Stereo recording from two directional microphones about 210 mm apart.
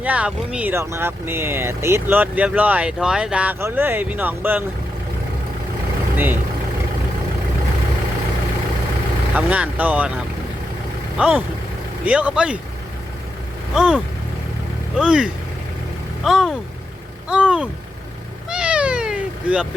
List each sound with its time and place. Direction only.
0.0 s speech: 5° right (ahead or behind)
6.1 s speech: 10° right (ahead or behind)
9.3 s speech: 5° right (ahead or behind)
11.2 s speech: 5° right (ahead or behind)
13.7 s speech: centre (ahead or behind)
18.4 s cat: 5° right (ahead or behind)